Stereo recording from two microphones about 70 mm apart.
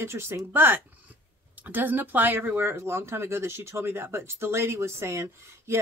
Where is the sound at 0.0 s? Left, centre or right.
Right.